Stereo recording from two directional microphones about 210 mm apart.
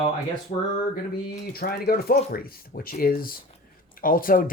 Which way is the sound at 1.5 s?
45° left (ahead or behind).